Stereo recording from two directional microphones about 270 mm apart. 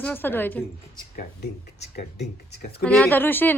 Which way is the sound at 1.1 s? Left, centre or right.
Left.